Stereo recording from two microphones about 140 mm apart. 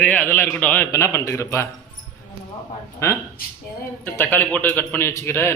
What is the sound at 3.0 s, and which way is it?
A man's voice, 20° left (ahead or behind).